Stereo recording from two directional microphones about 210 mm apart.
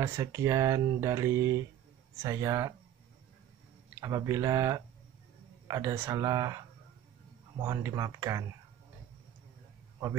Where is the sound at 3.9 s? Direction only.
15° right (ahead or behind).